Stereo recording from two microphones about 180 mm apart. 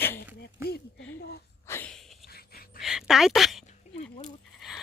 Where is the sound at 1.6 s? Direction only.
15° left (ahead or behind).